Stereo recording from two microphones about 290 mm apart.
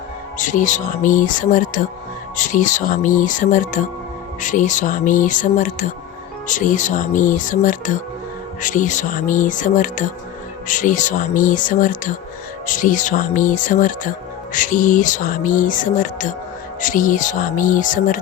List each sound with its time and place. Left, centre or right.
0.3 s speech: left